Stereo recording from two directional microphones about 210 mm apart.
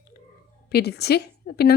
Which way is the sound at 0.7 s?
50° left (ahead or behind).